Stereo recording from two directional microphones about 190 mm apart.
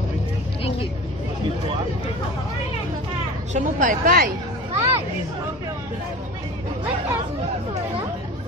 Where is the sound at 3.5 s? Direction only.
40° right (ahead or behind).